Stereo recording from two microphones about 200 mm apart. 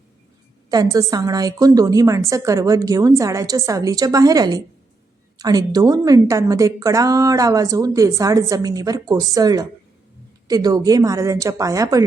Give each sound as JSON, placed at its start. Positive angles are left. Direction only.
{"t": 0.7, "sound": "a woman's voice", "side_deg": -20}